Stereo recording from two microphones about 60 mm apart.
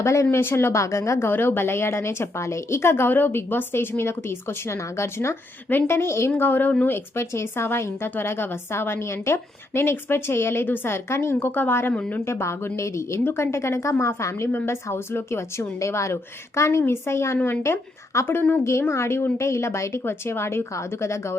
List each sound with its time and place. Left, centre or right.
0.0 s speech: left
1.3 s a woman's voice: left
6.8 s a woman's voice: left
11.3 s a woman's voice: left
11.9 s a woman's voice: left
12.2 s a woman's voice: left
14.5 s a woman's voice: left
17.6 s speech: left
18.3 s a woman's voice: left
18.6 s a woman's voice: left
20.7 s speech: left